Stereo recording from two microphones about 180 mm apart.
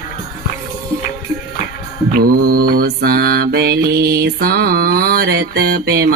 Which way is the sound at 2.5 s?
55° right (ahead or behind).